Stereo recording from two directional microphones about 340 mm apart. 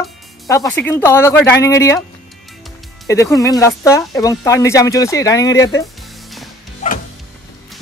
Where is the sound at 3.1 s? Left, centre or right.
Centre.